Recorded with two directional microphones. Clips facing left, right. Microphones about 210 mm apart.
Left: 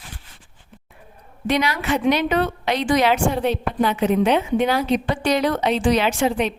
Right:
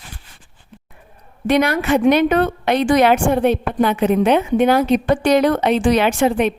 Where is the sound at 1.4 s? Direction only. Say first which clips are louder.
Right 5 dB; 55° right (ahead or behind).